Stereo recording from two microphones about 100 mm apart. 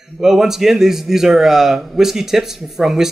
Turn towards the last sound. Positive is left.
turn(degrees=-5)  # may be behind; listen again after turning